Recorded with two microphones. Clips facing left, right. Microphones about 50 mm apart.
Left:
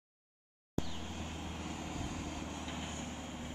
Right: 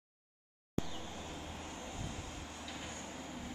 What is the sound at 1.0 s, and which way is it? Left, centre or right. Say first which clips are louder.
Vehicle: left 2 dB; left.